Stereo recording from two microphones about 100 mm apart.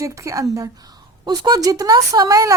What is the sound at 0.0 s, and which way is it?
A woman's voice, 30° right (ahead or behind).